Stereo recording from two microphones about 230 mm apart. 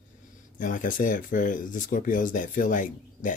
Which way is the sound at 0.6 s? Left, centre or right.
Left.